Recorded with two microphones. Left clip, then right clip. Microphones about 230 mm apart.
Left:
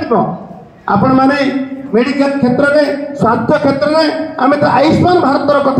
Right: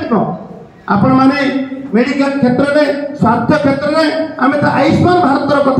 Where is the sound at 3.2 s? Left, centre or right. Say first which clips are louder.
Left 1 dB; left.